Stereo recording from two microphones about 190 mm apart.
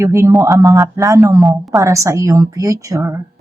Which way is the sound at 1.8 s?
15° right (ahead or behind).